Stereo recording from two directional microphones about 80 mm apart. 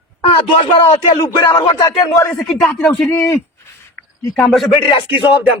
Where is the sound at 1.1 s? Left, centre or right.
Left.